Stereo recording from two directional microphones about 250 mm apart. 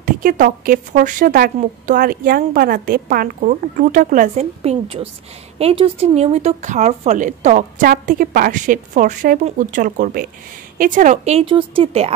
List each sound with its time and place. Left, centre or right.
0.0 s speech: right